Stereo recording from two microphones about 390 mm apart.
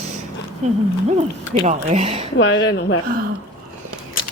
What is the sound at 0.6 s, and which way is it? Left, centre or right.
Speech, centre.